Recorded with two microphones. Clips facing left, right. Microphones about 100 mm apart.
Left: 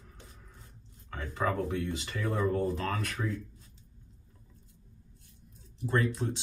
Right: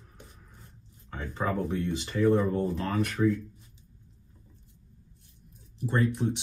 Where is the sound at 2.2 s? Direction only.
20° right (ahead or behind).